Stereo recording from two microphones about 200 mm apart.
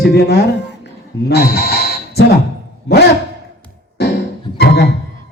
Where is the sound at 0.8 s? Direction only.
50° left (ahead or behind).